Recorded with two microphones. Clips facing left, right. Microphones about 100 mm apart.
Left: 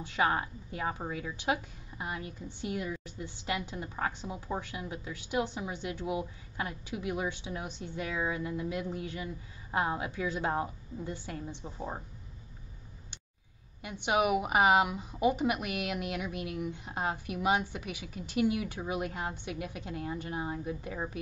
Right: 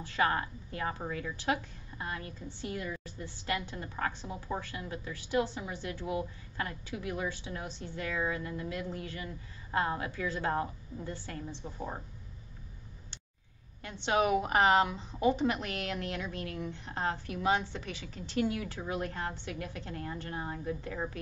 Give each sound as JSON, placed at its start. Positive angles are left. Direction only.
{"t": 0.0, "sound": "a woman's voice", "side_deg": 20}
{"t": 13.8, "sound": "a woman's voice", "side_deg": 15}